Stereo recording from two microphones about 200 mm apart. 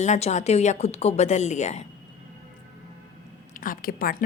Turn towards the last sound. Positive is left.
turn(degrees=45)  # may be behind; listen again after turning